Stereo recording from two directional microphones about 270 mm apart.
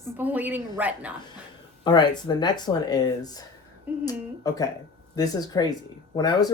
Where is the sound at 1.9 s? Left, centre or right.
Centre.